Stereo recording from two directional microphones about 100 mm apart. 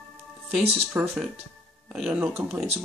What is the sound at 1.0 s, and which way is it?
Speech, 20° right (ahead or behind).